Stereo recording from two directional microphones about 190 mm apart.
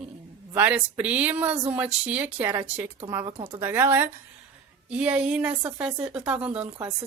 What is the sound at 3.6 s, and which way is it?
A woman's voice, 10° right (ahead or behind).